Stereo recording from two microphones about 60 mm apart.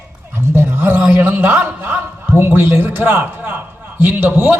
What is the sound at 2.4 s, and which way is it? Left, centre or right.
A man's voice, right.